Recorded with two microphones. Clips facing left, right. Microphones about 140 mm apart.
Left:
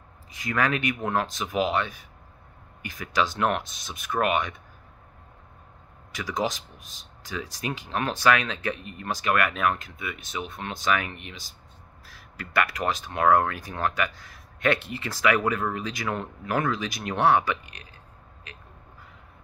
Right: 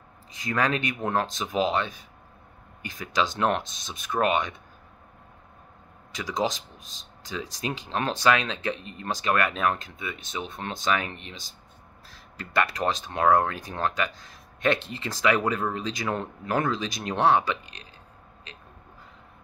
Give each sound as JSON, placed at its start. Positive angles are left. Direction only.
{"t": 0.4, "sound": "speech", "side_deg": -25}
{"t": 6.1, "sound": "speech", "side_deg": -20}